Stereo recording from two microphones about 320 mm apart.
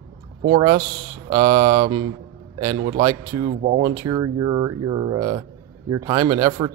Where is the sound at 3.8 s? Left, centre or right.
Centre.